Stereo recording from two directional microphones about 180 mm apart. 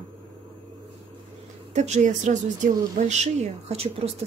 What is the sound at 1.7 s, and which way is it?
A woman's voice, 40° right (ahead or behind).